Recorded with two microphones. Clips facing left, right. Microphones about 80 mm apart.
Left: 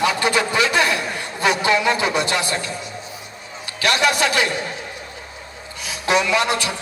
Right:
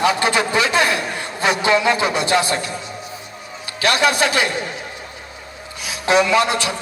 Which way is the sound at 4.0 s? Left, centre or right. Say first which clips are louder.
Right 1 dB; right.